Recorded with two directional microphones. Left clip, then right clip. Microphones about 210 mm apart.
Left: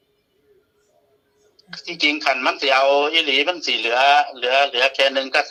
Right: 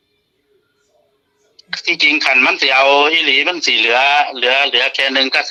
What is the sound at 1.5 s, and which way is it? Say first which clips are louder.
Speech: right 9 dB; 25° right (ahead or behind).